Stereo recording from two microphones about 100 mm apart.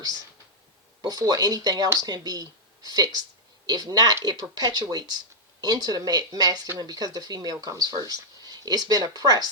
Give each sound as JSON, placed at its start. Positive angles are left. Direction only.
{"t": 1.0, "sound": "speech", "side_deg": -40}